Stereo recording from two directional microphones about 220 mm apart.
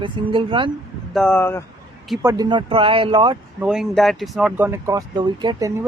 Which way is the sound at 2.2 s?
15° right (ahead or behind).